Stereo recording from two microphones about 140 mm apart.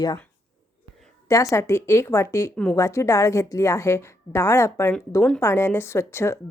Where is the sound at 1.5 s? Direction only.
20° left (ahead or behind).